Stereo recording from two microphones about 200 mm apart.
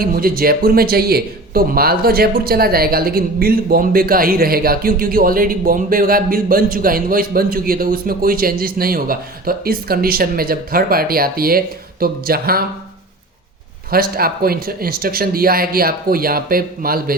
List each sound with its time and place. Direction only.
0.0 s speech: 45° right (ahead or behind)
13.9 s speech: 50° right (ahead or behind)